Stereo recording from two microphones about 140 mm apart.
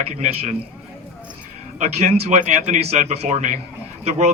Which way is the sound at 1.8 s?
60° right (ahead or behind).